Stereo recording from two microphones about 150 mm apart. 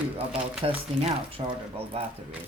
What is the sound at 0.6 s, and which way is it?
A woman's voice, 40° right (ahead or behind).